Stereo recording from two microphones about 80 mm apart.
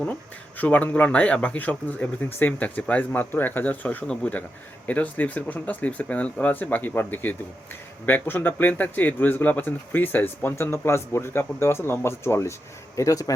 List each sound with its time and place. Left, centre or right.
0.0 s a man's voice: left
13.0 s a man's voice: left